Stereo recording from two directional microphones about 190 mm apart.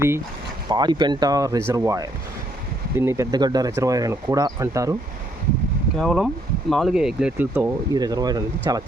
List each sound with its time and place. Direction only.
0.7 s speech: 20° right (ahead or behind)
6.0 s speech: centre (ahead or behind)
7.9 s speech: 20° right (ahead or behind)